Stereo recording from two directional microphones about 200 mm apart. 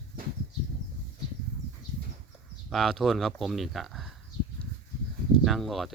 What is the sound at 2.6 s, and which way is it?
Speech, centre (ahead or behind).